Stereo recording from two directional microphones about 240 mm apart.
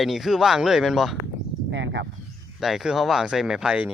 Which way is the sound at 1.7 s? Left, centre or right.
Right.